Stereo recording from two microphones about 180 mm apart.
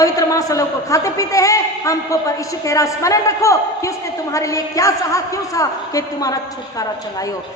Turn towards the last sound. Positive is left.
turn(degrees=20)  # may be behind; listen again after turning